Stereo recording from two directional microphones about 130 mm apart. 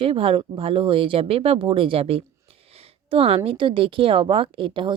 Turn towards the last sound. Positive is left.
turn(degrees=-40)  # may be behind; listen again after turning